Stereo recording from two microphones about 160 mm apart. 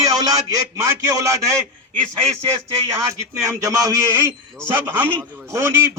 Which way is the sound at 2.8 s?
20° right (ahead or behind).